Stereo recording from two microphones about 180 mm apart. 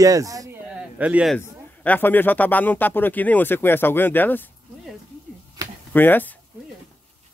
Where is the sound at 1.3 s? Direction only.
10° left (ahead or behind).